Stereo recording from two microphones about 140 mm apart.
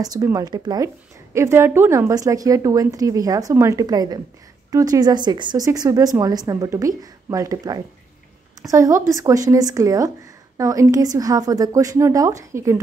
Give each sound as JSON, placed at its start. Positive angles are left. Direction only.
{"t": 0.0, "sound": "a woman's voice", "side_deg": -25}